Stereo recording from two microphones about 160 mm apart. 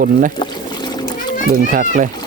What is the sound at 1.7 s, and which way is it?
Speech, 55° right (ahead or behind).